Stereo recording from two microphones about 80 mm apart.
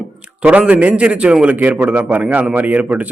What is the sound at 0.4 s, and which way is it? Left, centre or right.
A man's voice, centre.